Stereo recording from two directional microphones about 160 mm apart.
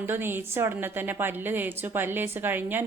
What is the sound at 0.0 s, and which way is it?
A woman's voice, 15° right (ahead or behind).